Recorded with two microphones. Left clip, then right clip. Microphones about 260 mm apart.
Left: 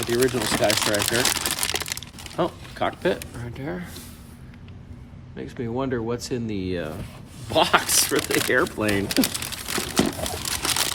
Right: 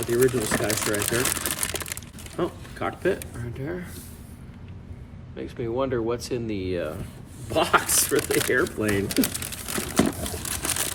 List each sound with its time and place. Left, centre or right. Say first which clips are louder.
0.0 s speech: even; centre
2.3 s speech: left 3 dB; left
5.4 s speech: right 1 dB; left
7.9 s speech: left 2 dB; centre
8.9 s crumpling: left 2 dB; centre